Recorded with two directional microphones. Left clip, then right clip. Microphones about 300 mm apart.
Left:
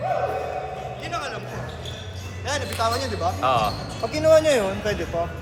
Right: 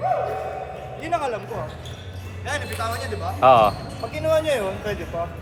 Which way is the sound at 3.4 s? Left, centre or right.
Right.